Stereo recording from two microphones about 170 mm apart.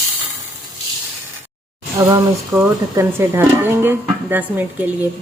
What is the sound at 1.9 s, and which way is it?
Speech, 20° right (ahead or behind).